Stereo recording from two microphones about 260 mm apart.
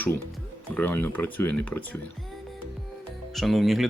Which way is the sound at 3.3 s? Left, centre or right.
Centre.